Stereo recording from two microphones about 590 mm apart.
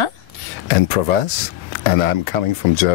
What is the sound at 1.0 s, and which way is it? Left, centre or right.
Speech, left.